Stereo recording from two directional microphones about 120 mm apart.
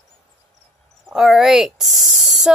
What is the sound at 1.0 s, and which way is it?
Speech, centre (ahead or behind).